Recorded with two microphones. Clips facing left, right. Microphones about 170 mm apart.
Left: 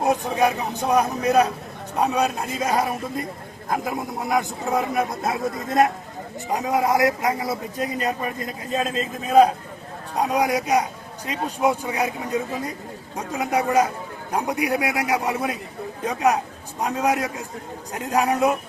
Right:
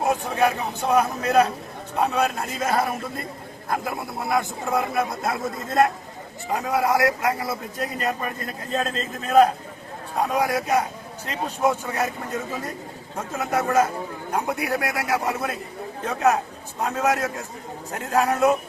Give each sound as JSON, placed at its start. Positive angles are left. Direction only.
{"t": 0.0, "sound": "a man's voice", "side_deg": 20}